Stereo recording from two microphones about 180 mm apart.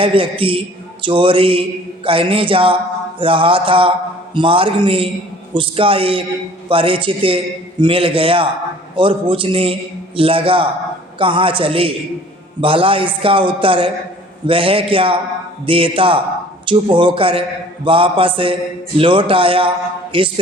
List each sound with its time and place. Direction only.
0.0 s a man's voice: 30° right (ahead or behind)